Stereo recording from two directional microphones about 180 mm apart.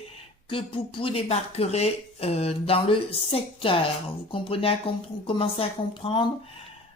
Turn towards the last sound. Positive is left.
turn(degrees=30)  # may be behind; listen again after turning